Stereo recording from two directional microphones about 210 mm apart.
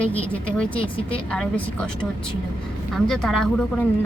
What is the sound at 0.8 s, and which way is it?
Speech, 25° left (ahead or behind).